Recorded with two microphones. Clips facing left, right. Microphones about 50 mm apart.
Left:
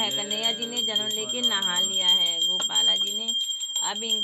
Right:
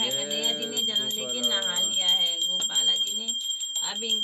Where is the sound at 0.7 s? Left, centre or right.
Left.